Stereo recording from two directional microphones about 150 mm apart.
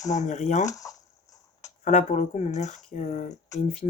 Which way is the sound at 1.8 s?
55° left (ahead or behind).